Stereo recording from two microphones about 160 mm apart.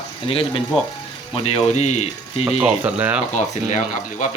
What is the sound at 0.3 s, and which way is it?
Speech, 35° left (ahead or behind).